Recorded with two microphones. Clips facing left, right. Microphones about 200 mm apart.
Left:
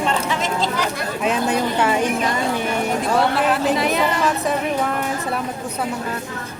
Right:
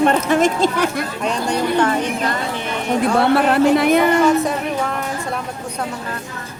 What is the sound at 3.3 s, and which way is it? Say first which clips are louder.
Speech: right 5 dB; 55° right (ahead or behind).